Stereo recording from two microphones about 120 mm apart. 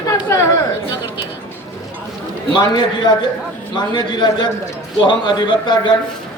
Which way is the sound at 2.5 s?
40° left (ahead or behind).